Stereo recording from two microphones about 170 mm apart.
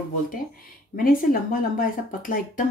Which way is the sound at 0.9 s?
55° left (ahead or behind).